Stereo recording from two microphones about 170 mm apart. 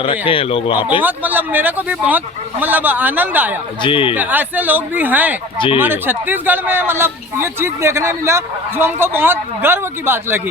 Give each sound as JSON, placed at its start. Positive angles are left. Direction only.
{"t": 0.0, "sound": "speech", "side_deg": 30}
{"t": 1.0, "sound": "speech", "side_deg": -10}
{"t": 3.8, "sound": "speech", "side_deg": 30}
{"t": 4.1, "sound": "speech", "side_deg": -10}
{"t": 5.5, "sound": "speech", "side_deg": 30}
{"t": 5.8, "sound": "speech", "side_deg": -10}